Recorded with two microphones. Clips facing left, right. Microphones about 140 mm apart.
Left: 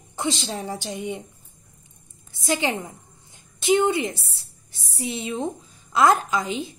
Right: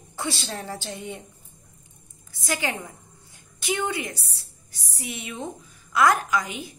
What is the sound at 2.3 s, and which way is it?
A woman's voice, 25° left (ahead or behind).